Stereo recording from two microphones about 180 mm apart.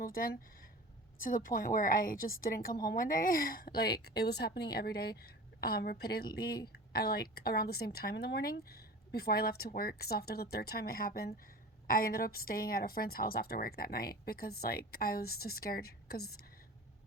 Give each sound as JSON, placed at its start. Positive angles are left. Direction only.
{"t": 0.0, "sound": "a woman's voice", "side_deg": 55}